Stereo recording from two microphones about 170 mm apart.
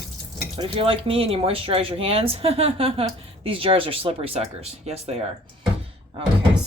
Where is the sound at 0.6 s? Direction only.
35° right (ahead or behind).